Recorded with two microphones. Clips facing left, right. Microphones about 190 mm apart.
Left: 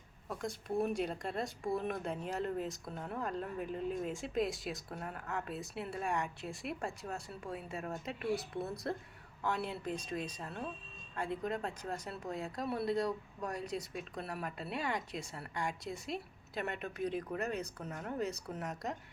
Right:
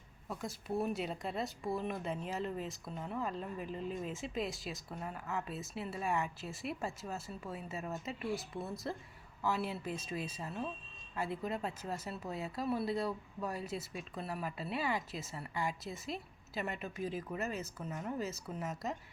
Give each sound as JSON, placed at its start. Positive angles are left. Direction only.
{"t": 0.3, "sound": "speech", "side_deg": -5}